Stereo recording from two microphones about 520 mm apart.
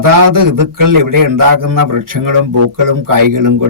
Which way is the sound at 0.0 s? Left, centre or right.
Right.